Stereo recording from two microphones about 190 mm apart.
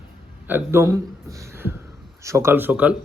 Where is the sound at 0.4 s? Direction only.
10° right (ahead or behind).